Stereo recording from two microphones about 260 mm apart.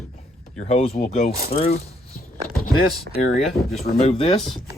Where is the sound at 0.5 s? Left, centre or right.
Left.